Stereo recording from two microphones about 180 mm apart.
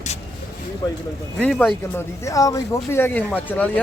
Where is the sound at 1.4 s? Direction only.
5° left (ahead or behind).